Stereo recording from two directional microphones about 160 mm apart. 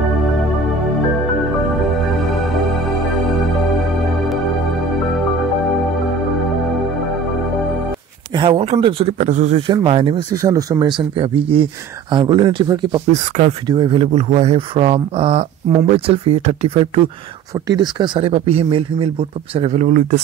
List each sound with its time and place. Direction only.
8.3 s speech: 35° right (ahead or behind)
9.7 s speech: 30° right (ahead or behind)
10.3 s speech: 20° right (ahead or behind)
13.3 s speech: 50° right (ahead or behind)
13.7 s speech: 30° right (ahead or behind); by 20.2 s 55° right (ahead or behind)